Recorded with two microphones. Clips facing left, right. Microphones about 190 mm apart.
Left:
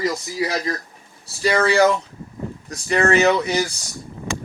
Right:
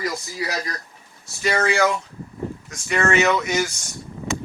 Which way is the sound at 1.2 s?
35° left (ahead or behind).